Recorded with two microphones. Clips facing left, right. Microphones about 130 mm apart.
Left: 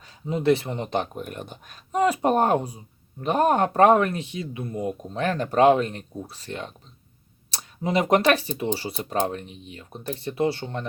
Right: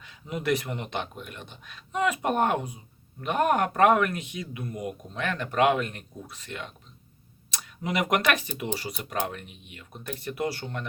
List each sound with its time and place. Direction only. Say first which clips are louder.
0.0 s speech: left 7 dB; 35° left (ahead or behind)